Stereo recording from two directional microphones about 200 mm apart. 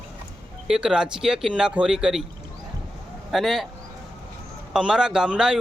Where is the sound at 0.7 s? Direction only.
5° right (ahead or behind).